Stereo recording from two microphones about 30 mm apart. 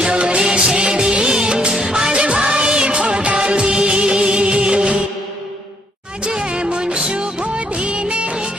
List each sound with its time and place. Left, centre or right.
0.0 s music: right
0.4 s music: right
0.8 s music of bollywood: right
1.8 s music: right
6.2 s music: right